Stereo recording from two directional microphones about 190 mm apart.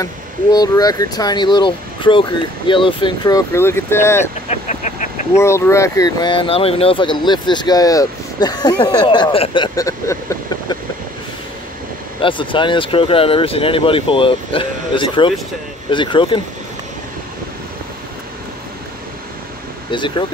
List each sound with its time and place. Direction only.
0.0 s speech: 20° left (ahead or behind)
4.5 s vehicle: 40° left (ahead or behind)
5.4 s speech: 15° left (ahead or behind)
12.2 s speech: 25° left (ahead or behind)
19.9 s speech: 25° left (ahead or behind)